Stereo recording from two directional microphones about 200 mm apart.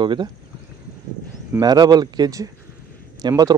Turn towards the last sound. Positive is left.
turn(degrees=-20)  # may be behind; listen again after turning